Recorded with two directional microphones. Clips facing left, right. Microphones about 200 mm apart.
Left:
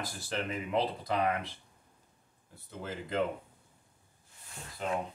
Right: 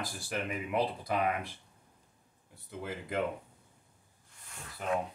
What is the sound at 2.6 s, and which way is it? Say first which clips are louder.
Speech: right 1 dB; 15° right (ahead or behind).